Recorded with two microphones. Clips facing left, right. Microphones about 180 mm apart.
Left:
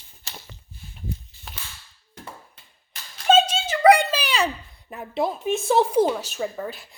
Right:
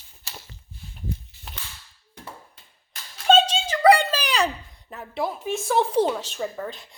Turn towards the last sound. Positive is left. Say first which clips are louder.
# left 1 dB
turn(degrees=5)  # may be behind; listen again after turning